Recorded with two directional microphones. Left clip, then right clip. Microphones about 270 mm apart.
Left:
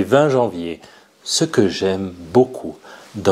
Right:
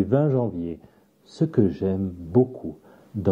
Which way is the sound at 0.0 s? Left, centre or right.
Centre.